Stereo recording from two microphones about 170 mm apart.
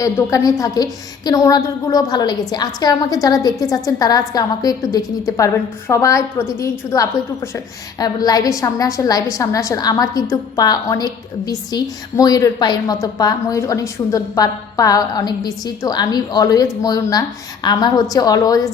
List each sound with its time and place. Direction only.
0.0 s a woman's voice: 20° left (ahead or behind)